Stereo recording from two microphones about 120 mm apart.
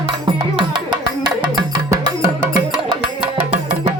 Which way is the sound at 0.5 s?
40° right (ahead or behind).